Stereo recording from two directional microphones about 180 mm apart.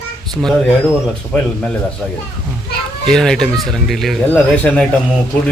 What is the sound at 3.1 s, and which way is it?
Speech, 5° left (ahead or behind).